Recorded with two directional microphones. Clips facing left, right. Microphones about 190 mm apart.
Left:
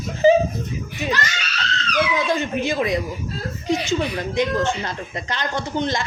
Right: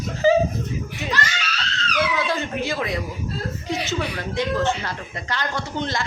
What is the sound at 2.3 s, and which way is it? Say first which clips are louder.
Cat: left 3 dB; 15° left (ahead or behind).